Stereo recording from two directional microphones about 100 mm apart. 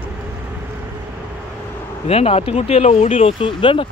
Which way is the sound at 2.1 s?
85° left.